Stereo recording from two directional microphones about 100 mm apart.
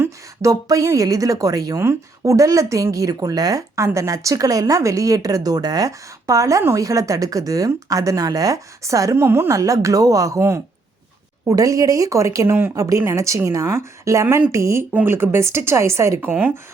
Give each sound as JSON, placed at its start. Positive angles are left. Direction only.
{"t": 0.0, "sound": "a woman's voice", "side_deg": -30}